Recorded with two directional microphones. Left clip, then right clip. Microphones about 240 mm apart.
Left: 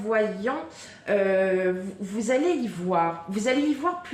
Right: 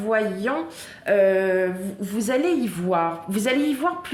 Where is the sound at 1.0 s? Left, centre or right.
Right.